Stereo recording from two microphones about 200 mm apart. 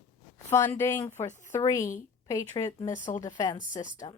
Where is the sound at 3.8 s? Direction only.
40° left (ahead or behind).